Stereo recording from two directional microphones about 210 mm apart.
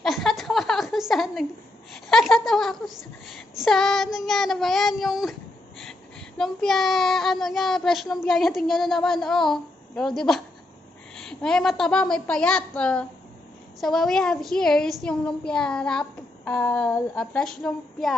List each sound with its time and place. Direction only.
0.0 s a sound: centre (ahead or behind)
2.0 s a woman's voice: centre (ahead or behind)
6.3 s a woman's voice: centre (ahead or behind)